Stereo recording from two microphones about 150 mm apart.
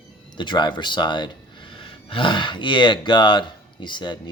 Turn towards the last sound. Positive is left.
turn(degrees=30)  # may be behind; listen again after turning